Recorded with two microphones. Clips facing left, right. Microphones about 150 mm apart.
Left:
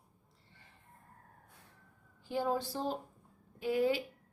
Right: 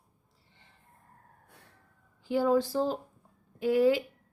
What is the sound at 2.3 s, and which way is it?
A woman's voice, 90° right.